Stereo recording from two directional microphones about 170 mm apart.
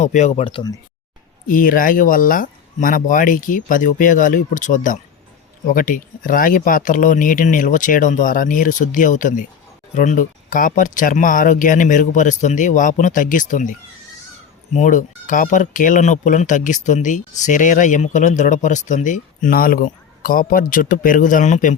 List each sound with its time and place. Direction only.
0.0 s speech: 45° left (ahead or behind); by 0.8 s 25° left (ahead or behind)
1.5 s speech: 55° left (ahead or behind)